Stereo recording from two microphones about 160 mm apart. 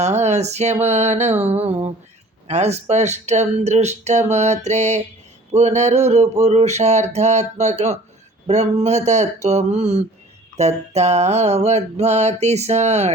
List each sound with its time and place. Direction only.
0.0 s mantra: 45° right (ahead or behind)